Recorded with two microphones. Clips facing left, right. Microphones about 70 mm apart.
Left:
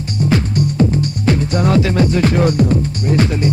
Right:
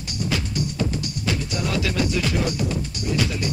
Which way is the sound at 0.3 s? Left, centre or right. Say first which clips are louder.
Left 10 dB; left.